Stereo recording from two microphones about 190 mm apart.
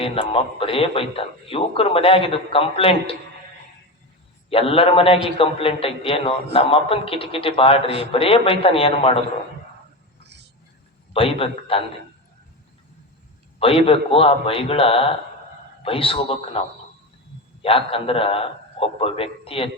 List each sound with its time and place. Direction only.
0.0 s a man's voice: 30° left (ahead or behind)
4.4 s a man's voice: 30° left (ahead or behind)
11.1 s a man's voice: 30° left (ahead or behind)
13.6 s a man's voice: 30° left (ahead or behind)
17.6 s a man's voice: 30° left (ahead or behind)